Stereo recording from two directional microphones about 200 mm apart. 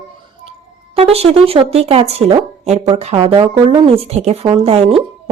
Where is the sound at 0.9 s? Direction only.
30° right (ahead or behind).